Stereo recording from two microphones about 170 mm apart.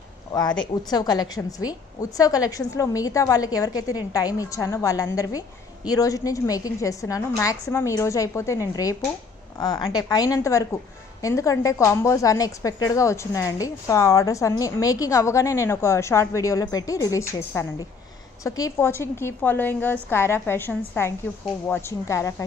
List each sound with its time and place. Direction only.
0.3 s a woman's voice: 25° left (ahead or behind)